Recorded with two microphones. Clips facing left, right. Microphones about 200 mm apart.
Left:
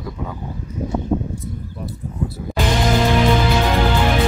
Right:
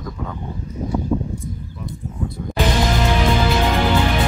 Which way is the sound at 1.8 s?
5° left (ahead or behind).